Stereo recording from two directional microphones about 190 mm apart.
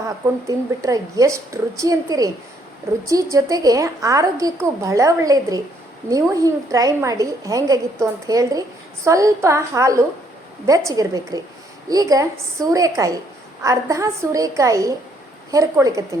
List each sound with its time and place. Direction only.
0.4 s a woman's voice: 15° right (ahead or behind)